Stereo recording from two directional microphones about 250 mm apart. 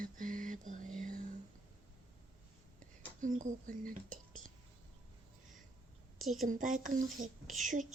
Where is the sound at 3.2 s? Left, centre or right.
Right.